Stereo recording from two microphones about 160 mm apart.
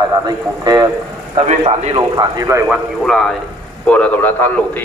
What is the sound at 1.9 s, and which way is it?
Speech, 25° right (ahead or behind).